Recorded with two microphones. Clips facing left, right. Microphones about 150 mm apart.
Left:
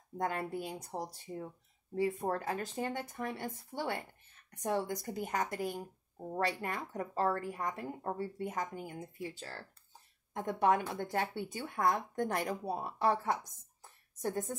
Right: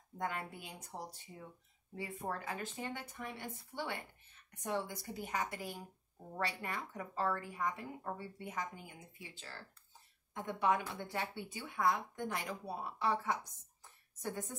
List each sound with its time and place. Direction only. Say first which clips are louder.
0.2 s a woman's voice: left 6 dB; 40° left (ahead or behind)